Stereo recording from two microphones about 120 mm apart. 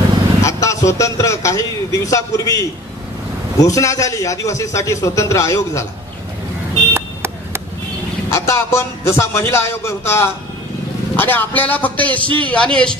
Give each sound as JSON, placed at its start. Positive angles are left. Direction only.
{"t": 0.4, "sound": "a man's voice", "side_deg": 25}
{"t": 6.9, "sound": "vehicle", "side_deg": -20}
{"t": 8.3, "sound": "a man's voice", "side_deg": 25}